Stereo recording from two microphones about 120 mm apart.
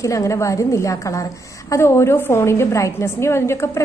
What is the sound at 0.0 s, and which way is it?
A woman's voice, 25° left (ahead or behind).